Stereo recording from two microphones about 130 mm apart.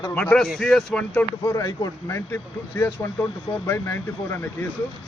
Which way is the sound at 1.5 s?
30° left (ahead or behind).